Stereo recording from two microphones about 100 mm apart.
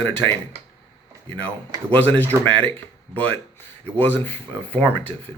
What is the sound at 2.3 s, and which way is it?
Speech, 25° right (ahead or behind).